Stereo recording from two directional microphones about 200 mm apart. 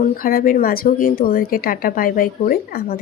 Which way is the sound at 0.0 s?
45° left (ahead or behind).